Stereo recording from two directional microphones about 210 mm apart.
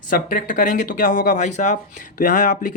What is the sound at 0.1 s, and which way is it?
Speech, 40° left (ahead or behind).